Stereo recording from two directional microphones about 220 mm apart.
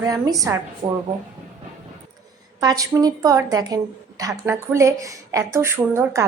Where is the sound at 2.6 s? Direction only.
15° right (ahead or behind).